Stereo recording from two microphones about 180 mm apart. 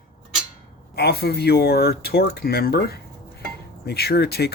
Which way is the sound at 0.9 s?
60° left (ahead or behind).